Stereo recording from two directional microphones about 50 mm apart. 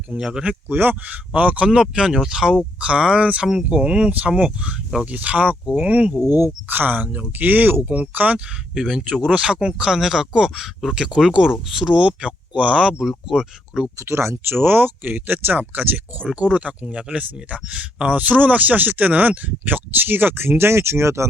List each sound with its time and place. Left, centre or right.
0.2 s speech: centre
0.7 s speech: right
6.3 s speech: right
8.7 s speech: centre
10.0 s speech: centre
10.9 s speech: centre
11.9 s speech: right
13.0 s speech: centre
14.0 s speech: right
14.6 s speech: right
16.2 s speech: right